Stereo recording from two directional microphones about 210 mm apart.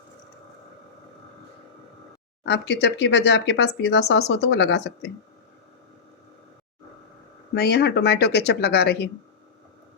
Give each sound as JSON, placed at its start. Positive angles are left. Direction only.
{"t": 2.4, "sound": "speech", "side_deg": 55}
{"t": 7.5, "sound": "speech", "side_deg": 50}